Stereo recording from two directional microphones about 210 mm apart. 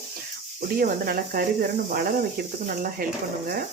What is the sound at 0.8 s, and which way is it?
Speech, 45° right (ahead or behind).